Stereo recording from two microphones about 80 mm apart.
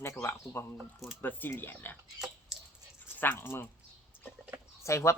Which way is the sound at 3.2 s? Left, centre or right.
Left.